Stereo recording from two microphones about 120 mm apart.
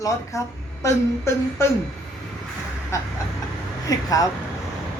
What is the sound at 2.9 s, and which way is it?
A woman's voice, 25° left (ahead or behind).